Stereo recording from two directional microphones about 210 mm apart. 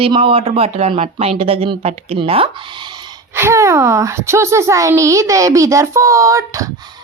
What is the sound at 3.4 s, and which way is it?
A woman's voice, 15° right (ahead or behind).